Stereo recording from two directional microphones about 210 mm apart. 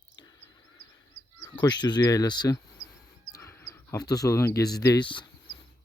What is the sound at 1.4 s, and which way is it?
Speech, 20° left (ahead or behind).